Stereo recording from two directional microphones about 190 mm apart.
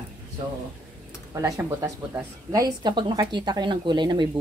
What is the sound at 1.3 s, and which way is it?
Speech, 15° right (ahead or behind).